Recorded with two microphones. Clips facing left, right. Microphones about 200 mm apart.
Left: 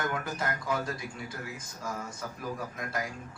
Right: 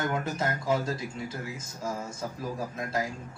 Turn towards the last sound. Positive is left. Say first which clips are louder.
# right 4 dB
turn(degrees=-25)  # may be behind; listen again after turning